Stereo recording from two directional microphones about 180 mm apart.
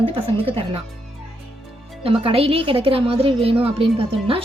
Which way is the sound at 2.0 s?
30° right (ahead or behind).